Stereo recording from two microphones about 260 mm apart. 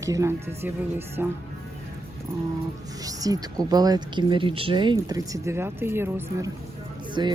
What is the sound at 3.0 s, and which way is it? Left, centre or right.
Speech, centre.